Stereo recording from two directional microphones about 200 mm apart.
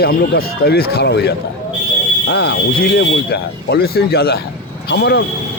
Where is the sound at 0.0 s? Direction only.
50° left (ahead or behind).